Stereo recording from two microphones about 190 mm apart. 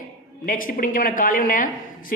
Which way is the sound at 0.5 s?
45° left (ahead or behind).